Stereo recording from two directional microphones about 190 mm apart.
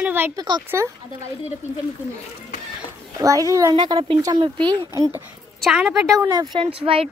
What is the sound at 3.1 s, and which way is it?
Speech, 15° right (ahead or behind).